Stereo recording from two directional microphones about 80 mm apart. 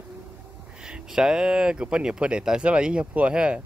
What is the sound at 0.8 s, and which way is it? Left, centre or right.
Speech, centre.